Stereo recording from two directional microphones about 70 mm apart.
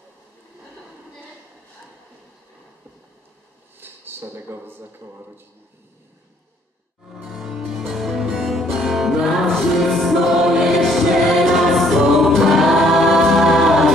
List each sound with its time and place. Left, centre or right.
3.8 s speech: right
7.2 s music: centre